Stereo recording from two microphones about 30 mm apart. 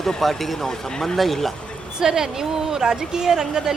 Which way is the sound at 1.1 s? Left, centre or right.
Centre.